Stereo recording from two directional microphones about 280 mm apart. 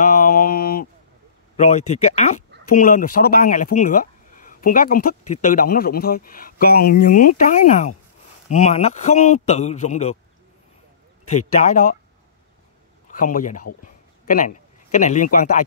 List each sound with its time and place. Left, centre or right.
0.0 s a sound: left
1.6 s a man's voice: left
11.6 s a man's voice: left
13.1 s a man's voice: left